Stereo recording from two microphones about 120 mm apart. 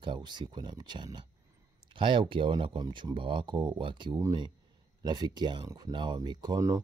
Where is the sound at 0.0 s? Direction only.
40° right (ahead or behind).